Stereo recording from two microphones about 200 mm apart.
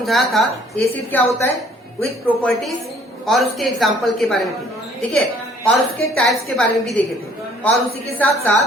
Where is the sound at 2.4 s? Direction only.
Centre (ahead or behind).